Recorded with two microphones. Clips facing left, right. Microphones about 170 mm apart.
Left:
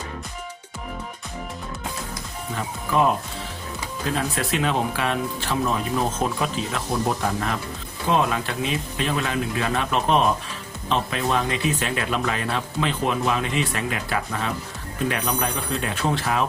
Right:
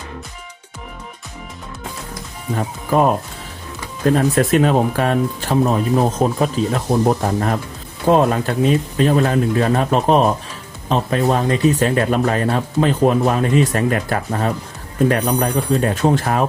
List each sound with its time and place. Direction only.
2.6 s speech: 45° right (ahead or behind)